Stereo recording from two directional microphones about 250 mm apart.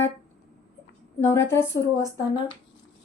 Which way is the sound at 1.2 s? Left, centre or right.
Centre.